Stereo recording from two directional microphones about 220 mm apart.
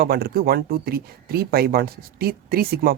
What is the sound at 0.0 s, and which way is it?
Speech, 45° right (ahead or behind).